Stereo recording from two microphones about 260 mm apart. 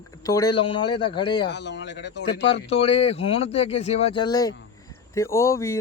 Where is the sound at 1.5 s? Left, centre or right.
Left.